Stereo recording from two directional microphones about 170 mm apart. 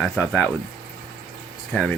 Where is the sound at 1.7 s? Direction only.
Centre (ahead or behind).